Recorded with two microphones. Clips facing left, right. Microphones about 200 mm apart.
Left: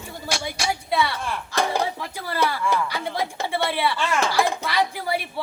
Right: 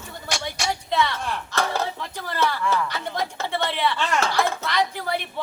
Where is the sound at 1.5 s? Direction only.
15° left (ahead or behind).